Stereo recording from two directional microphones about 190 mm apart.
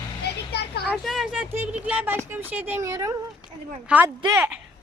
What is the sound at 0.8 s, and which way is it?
Speech, centre (ahead or behind).